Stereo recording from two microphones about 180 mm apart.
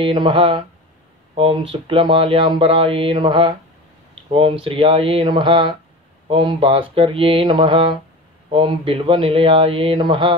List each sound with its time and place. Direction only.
0.0 s speech: 30° right (ahead or behind)